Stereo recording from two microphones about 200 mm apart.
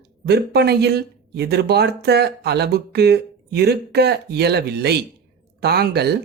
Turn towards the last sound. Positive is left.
turn(degrees=-55)  # may be behind; listen again after turning